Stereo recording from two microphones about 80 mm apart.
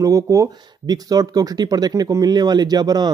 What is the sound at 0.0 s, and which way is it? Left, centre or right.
Speech, right.